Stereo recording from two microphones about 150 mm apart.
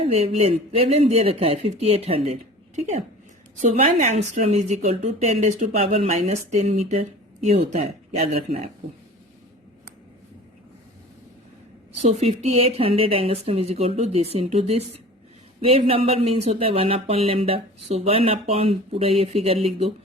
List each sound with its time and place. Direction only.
0.0 s speech: 45° right (ahead or behind)
12.0 s speech: 45° right (ahead or behind)